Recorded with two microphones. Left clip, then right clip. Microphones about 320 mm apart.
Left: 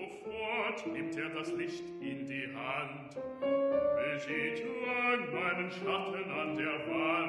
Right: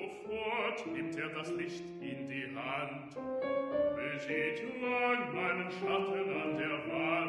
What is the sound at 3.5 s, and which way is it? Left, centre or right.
Music, centre.